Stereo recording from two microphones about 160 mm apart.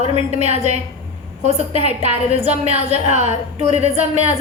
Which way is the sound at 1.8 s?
40° right (ahead or behind).